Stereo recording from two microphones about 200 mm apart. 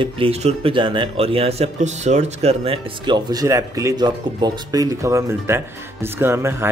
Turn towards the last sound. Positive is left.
turn(degrees=-10)  # may be behind; listen again after turning